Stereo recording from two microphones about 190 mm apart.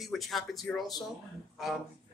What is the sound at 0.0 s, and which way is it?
Speech, centre (ahead or behind).